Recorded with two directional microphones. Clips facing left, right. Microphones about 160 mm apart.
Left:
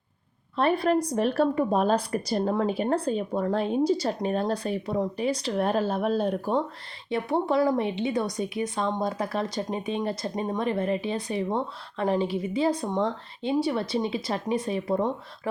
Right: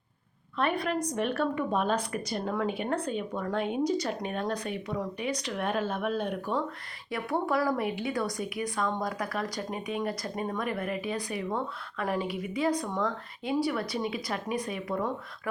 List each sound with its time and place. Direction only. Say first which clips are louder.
0.5 s speech: left 6 dB; 30° left (ahead or behind)